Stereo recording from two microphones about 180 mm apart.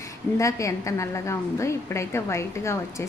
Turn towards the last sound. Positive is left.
turn(degrees=15)  # may be behind; listen again after turning